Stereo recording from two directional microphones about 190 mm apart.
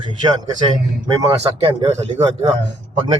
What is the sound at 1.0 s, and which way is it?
A man's voice, 20° right (ahead or behind).